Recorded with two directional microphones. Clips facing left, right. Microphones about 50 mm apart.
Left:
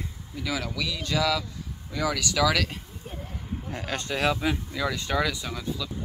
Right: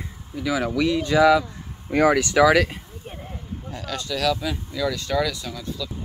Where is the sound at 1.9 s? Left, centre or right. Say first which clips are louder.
Right 10 dB; right.